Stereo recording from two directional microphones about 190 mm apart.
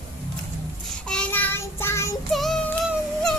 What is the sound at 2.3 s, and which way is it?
Music, centre (ahead or behind).